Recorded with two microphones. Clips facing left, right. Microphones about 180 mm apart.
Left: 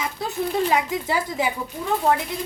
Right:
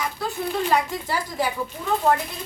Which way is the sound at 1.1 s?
20° left (ahead or behind).